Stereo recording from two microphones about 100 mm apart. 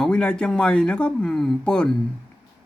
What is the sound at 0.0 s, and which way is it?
A man's voice, 10° left (ahead or behind).